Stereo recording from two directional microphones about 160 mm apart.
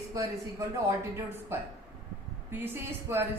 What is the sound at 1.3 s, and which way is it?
Speech, 15° right (ahead or behind).